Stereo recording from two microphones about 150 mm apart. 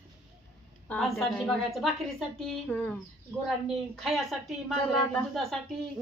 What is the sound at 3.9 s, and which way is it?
A woman's voice, centre (ahead or behind).